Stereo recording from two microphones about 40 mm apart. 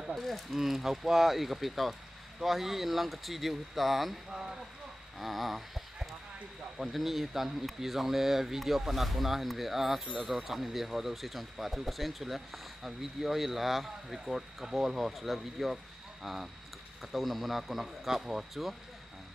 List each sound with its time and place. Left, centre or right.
0.1 s speech: centre
4.3 s speech: centre
5.2 s speech: centre